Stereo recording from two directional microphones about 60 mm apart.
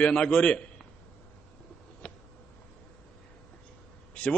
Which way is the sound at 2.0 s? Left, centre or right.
Centre.